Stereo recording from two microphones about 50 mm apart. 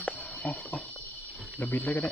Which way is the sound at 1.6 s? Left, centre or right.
Left.